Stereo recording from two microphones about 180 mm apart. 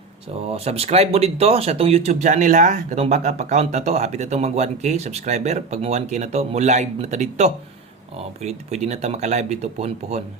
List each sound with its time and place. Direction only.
0.4 s speech: 35° right (ahead or behind)